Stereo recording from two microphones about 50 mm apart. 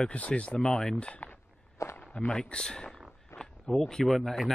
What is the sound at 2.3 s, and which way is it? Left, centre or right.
Speech, centre.